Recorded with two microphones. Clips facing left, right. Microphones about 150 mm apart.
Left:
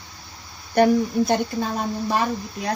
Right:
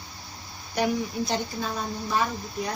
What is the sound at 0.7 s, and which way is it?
A woman's voice, 55° left (ahead or behind).